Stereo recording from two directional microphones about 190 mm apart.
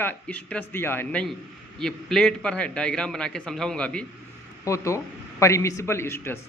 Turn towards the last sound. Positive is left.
turn(degrees=15)  # may be behind; listen again after turning